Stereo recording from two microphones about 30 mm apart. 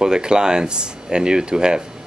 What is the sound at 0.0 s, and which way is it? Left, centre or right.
Speech, right.